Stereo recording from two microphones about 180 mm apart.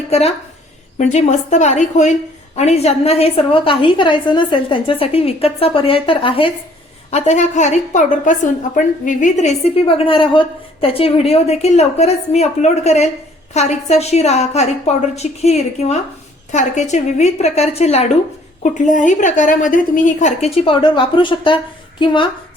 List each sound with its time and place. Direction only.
0.1 s a woman's voice: 35° left (ahead or behind)
7.1 s a woman's voice: 40° left (ahead or behind)